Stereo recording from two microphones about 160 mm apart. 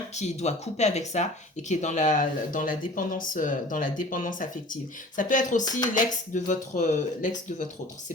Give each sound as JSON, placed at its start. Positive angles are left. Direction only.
{"t": 0.2, "sound": "speech", "side_deg": 45}